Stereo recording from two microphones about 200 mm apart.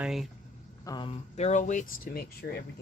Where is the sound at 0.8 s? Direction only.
20° left (ahead or behind); by 2.6 s 50° left (ahead or behind).